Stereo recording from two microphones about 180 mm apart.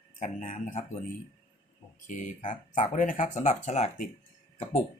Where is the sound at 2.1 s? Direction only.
45° left (ahead or behind).